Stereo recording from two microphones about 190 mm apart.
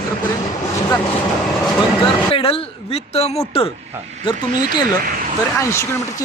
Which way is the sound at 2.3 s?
30° left (ahead or behind).